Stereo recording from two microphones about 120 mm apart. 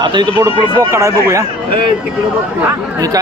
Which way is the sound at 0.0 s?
40° right (ahead or behind).